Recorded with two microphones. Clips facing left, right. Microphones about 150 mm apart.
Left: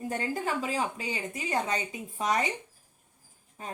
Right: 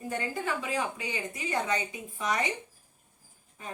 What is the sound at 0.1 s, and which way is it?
Speech, 35° left (ahead or behind).